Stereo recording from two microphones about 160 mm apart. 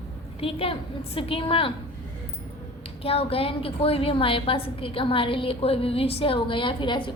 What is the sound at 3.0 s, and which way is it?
A woman's voice, 35° left (ahead or behind).